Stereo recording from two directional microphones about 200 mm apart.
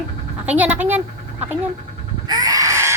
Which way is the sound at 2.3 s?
20° right (ahead or behind).